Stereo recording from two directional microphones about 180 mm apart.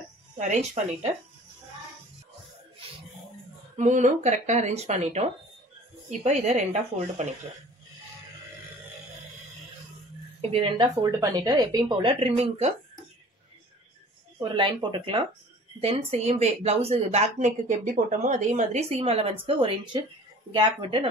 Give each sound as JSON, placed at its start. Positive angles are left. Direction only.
{"t": 0.4, "sound": "speech", "side_deg": -40}
{"t": 3.7, "sound": "speech", "side_deg": -40}
{"t": 10.4, "sound": "speech", "side_deg": -30}
{"t": 11.0, "sound": "a woman's voice", "side_deg": -20}
{"t": 14.4, "sound": "a woman's voice", "side_deg": -25}